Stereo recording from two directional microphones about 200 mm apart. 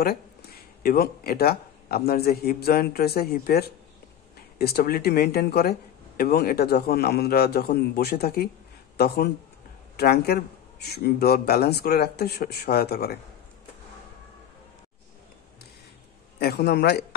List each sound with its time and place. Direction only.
0.0 s a man's voice: 50° left (ahead or behind)
16.3 s a man's voice: 50° left (ahead or behind)